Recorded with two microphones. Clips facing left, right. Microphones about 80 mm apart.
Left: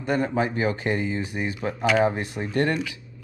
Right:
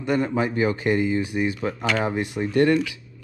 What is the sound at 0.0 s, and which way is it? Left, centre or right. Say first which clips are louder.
Speech: right 1 dB; left.